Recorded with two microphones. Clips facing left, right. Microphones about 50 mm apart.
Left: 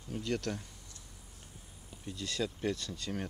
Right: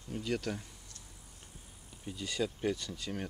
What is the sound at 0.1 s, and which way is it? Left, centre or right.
Speech, centre.